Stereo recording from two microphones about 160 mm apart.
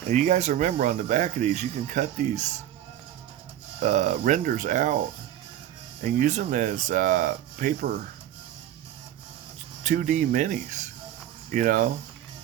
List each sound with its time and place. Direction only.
0.1 s speech: 50° right (ahead or behind)
3.8 s speech: 50° right (ahead or behind)
6.0 s speech: 50° right (ahead or behind)
9.8 s speech: 55° right (ahead or behind)